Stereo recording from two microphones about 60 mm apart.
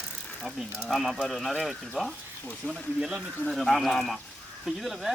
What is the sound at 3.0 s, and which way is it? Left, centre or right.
Speech, centre.